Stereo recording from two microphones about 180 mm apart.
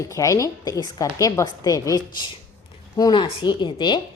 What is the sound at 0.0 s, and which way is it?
A woman's voice, 15° left (ahead or behind).